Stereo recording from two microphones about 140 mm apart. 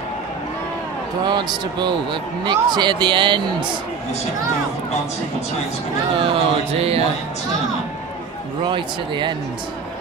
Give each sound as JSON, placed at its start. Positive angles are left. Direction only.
{"t": 1.2, "sound": "speech", "side_deg": -30}
{"t": 6.2, "sound": "music", "side_deg": -45}
{"t": 8.6, "sound": "speech", "side_deg": -35}